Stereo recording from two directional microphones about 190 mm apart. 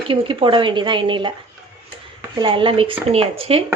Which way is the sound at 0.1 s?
25° right (ahead or behind).